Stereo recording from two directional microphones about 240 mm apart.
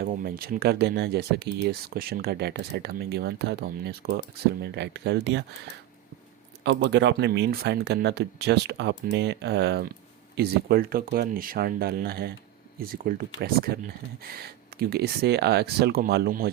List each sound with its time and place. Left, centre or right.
0.0 s speech: right
6.7 s speech: right